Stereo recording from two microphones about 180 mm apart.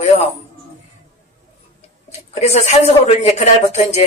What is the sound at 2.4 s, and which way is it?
Speech, 40° left (ahead or behind).